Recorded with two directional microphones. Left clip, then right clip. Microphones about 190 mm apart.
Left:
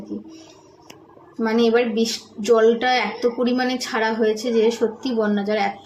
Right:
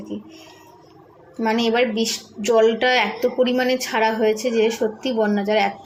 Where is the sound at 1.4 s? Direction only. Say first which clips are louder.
Left 1 dB; centre (ahead or behind).